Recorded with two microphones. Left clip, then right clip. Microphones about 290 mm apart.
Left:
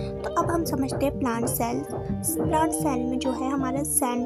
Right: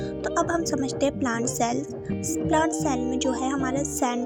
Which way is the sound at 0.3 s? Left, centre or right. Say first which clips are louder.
Even; left.